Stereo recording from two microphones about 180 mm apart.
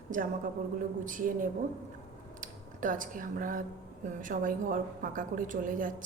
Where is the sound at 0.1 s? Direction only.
45° right (ahead or behind).